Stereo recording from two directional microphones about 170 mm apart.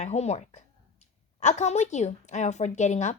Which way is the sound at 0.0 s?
40° left (ahead or behind).